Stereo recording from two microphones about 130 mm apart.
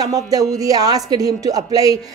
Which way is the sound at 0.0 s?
30° right (ahead or behind).